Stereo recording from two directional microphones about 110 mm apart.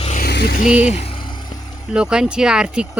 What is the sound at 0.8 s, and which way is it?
Speech, 85° left.